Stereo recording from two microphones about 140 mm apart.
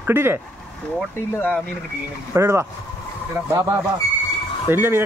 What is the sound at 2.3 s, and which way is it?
Speech, 20° right (ahead or behind).